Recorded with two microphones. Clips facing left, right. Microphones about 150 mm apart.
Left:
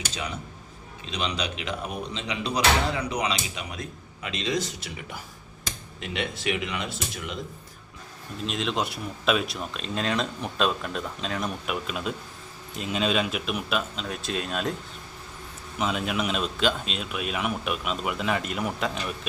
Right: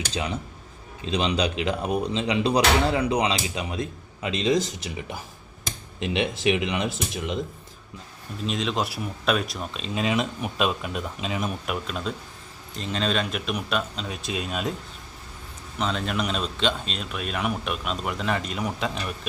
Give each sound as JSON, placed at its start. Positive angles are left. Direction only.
{"t": 1.1, "sound": "a man's voice", "side_deg": -35}
{"t": 8.4, "sound": "speech", "side_deg": 0}
{"t": 15.8, "sound": "speech", "side_deg": 5}